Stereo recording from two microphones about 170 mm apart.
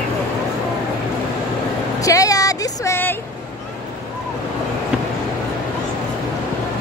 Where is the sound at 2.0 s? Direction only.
20° left (ahead or behind).